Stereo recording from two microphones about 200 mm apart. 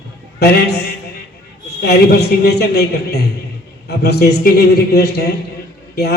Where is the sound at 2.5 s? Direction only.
55° left (ahead or behind).